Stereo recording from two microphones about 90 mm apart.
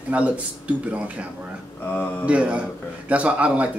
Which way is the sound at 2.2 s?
15° right (ahead or behind).